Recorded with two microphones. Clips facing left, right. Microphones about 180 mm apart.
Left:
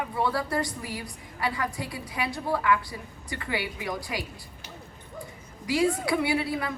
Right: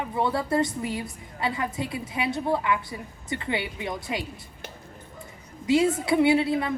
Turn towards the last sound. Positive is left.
turn(degrees=-25)  # may be behind; listen again after turning